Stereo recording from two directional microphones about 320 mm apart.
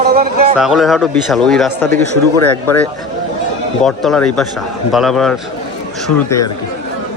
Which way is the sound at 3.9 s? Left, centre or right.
Centre.